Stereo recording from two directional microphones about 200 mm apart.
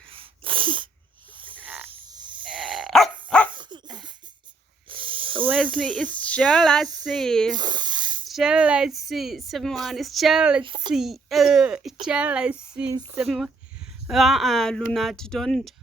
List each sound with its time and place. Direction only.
0.1 s sneeze: 25° right (ahead or behind)
1.4 s snoring: 25° right (ahead or behind)
1.6 s frog: 5° right (ahead or behind)
1.9 s frog: 20° right (ahead or behind)
2.4 s dog: 5° right (ahead or behind)
3.5 s dog: 20° right (ahead or behind)
4.9 s hiss: 25° right (ahead or behind)
5.7 s speech: 5° left (ahead or behind)
7.5 s snake: 20° right (ahead or behind)
8.3 s speech: 5° right (ahead or behind)
10.6 s speech: 25° right (ahead or behind)
10.9 s speech: centre (ahead or behind)